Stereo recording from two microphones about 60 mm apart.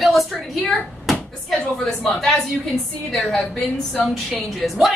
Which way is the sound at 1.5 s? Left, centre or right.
Centre.